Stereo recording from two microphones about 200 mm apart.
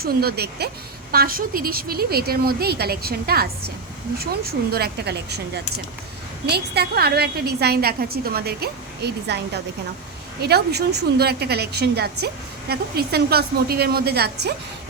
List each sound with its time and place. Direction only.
0.0 s a woman's voice: 50° right (ahead or behind)